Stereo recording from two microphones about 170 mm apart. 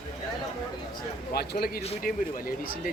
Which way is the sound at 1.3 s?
65° left (ahead or behind).